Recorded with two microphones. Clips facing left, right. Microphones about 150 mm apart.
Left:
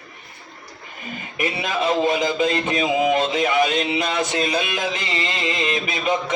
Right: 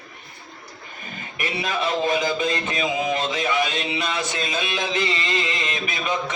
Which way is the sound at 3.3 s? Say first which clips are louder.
Left 4 dB; 30° left (ahead or behind).